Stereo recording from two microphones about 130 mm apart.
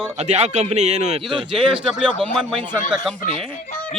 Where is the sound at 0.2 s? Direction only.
60° right (ahead or behind).